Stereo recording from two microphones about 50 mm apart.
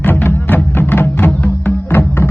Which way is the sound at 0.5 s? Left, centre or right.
Left.